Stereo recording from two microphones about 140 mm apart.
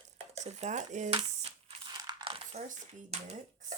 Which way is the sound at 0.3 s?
55° right (ahead or behind).